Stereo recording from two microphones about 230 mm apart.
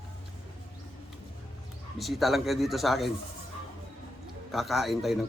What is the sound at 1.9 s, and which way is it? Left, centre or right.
Speech, centre.